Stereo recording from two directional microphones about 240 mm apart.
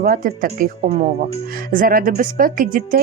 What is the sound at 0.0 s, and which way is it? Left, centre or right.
A woman's voice, right.